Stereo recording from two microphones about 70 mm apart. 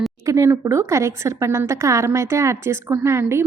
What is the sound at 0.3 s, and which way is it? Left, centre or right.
A woman's voice, right.